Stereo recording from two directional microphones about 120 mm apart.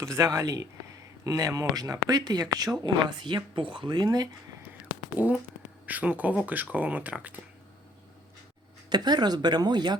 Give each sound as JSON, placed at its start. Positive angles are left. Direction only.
{"t": 0.0, "sound": "speech", "side_deg": -25}
{"t": 5.1, "sound": "speech", "side_deg": -15}
{"t": 8.9, "sound": "speech", "side_deg": -35}